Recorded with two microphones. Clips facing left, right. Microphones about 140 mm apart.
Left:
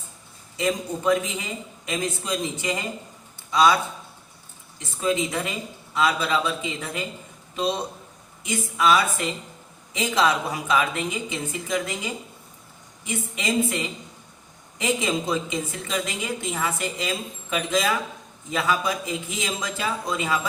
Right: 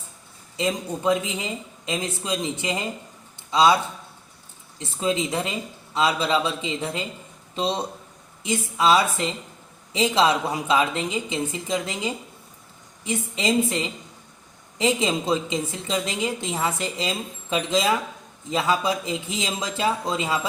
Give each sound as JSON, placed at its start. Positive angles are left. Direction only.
{"t": 0.5, "sound": "a woman's voice", "side_deg": -20}
{"t": 4.8, "sound": "a woman's voice", "side_deg": -25}
{"t": 14.8, "sound": "a woman's voice", "side_deg": -30}